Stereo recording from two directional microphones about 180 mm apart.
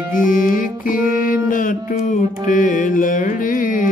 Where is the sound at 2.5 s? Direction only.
45° left (ahead or behind).